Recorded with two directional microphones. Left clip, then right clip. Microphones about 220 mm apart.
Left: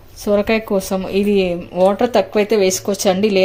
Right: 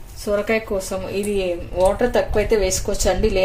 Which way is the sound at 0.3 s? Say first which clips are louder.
Left 4 dB; 45° left (ahead or behind).